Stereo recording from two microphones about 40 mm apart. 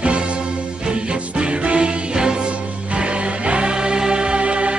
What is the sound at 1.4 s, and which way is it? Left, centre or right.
Music, right.